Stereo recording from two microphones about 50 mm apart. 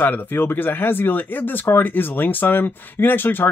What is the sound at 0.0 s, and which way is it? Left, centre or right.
Speech, left.